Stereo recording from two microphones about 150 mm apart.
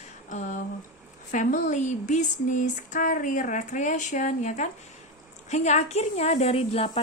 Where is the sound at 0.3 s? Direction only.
55° left (ahead or behind).